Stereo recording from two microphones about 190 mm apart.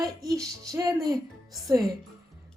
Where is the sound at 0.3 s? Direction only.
15° right (ahead or behind).